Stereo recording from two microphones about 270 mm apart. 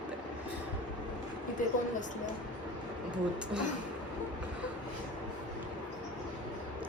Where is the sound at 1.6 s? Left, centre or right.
Left.